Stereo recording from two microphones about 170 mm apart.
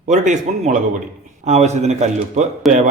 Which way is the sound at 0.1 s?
45° right (ahead or behind).